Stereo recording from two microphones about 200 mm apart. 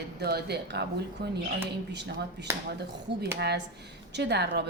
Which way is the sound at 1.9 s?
60° right (ahead or behind).